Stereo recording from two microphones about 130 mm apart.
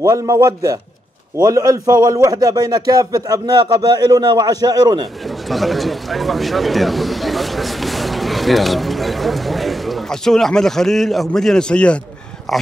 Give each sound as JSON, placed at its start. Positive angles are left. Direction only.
{"t": 0.0, "sound": "speech", "side_deg": -30}
{"t": 5.5, "sound": "a man's voice", "side_deg": 0}